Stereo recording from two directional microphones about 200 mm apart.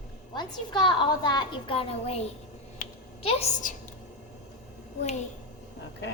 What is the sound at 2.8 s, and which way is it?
Finger snapping, 40° left (ahead or behind).